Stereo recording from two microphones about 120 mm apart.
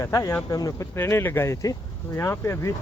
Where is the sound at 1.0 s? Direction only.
20° left (ahead or behind).